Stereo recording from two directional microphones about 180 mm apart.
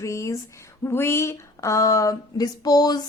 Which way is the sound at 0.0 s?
15° left (ahead or behind).